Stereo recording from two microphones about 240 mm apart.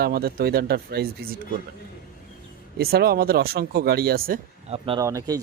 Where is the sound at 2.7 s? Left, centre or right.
Right.